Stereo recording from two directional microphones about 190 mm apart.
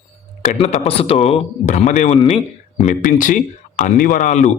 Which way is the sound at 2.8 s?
45° left (ahead or behind).